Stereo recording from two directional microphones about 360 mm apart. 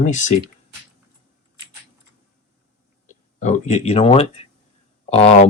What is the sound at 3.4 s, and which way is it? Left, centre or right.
Speech, centre.